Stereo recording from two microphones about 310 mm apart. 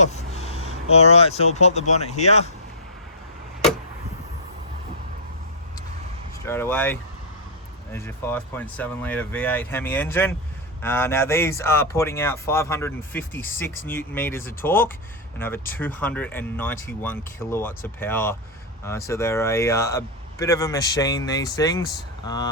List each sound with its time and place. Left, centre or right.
0.0 s speech: left
6.4 s speech: centre